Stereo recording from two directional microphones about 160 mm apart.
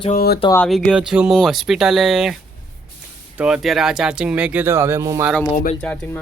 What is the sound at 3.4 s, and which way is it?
Speech, 5° right (ahead or behind).